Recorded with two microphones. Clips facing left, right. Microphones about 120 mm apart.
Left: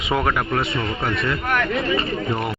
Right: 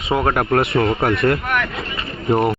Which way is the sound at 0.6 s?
70° right (ahead or behind).